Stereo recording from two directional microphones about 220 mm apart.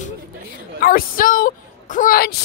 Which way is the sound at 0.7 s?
40° left (ahead or behind).